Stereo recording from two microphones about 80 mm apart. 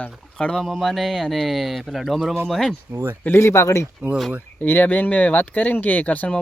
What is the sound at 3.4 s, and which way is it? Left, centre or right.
Speech, left.